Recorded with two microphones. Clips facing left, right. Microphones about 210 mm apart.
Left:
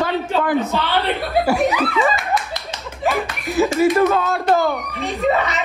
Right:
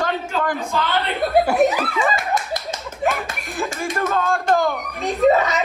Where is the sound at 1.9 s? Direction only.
50° right (ahead or behind).